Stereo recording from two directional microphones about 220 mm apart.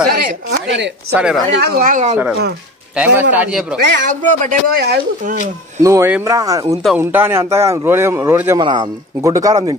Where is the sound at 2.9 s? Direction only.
5° right (ahead or behind).